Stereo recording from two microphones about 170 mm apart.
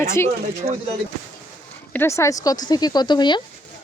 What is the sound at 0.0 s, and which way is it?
Speech, 15° left (ahead or behind).